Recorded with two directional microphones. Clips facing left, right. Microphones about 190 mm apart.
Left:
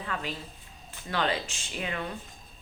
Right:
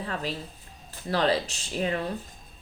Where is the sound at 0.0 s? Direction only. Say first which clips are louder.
Right 3 dB; 35° right (ahead or behind).